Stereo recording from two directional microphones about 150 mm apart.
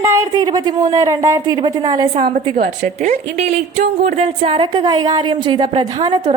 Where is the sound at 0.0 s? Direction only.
20° right (ahead or behind); by 2.6 s 35° right (ahead or behind).